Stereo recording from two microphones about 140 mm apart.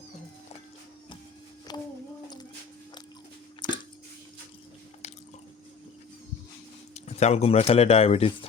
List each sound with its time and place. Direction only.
1.7 s speech: 30° left (ahead or behind)
2.2 s a sound: 30° left (ahead or behind)
3.6 s squish: 35° left (ahead or behind)
6.9 s speech: 50° left (ahead or behind)